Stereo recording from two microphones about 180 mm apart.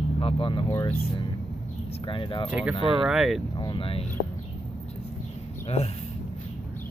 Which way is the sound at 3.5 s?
25° left (ahead or behind).